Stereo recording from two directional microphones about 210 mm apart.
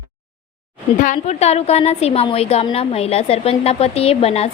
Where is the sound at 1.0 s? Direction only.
35° left (ahead or behind).